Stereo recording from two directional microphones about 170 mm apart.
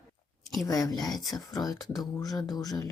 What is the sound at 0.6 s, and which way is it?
Speech, 20° left (ahead or behind).